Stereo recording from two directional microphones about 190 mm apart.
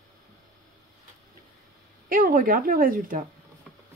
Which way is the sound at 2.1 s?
45° right (ahead or behind).